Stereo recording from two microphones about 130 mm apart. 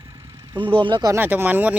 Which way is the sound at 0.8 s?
40° right (ahead or behind).